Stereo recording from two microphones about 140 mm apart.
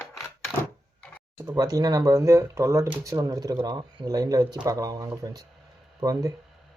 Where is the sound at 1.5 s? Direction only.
25° right (ahead or behind).